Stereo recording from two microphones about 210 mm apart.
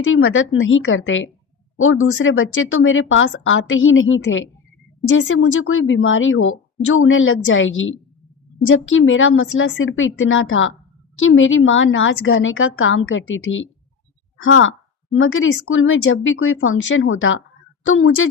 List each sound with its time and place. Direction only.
0.0 s a woman's voice: 70° left (ahead or behind)